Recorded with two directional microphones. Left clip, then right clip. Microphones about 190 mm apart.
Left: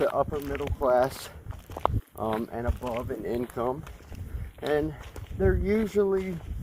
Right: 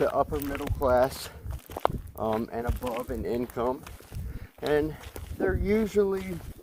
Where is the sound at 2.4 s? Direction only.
30° left (ahead or behind).